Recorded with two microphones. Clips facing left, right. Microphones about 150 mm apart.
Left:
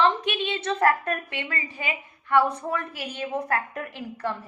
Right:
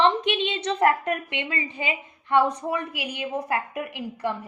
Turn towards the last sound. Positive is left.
turn(degrees=-15)  # may be behind; listen again after turning